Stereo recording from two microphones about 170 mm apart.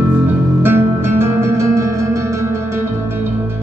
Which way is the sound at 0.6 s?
15° right (ahead or behind).